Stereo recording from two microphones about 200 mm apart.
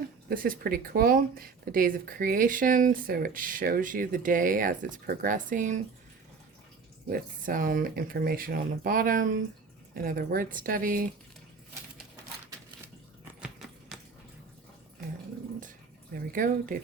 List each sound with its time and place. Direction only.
0.3 s speech: 45° right (ahead or behind)
7.1 s speech: 45° right (ahead or behind)
13.2 s biting: centre (ahead or behind)
16.1 s speech: 45° right (ahead or behind)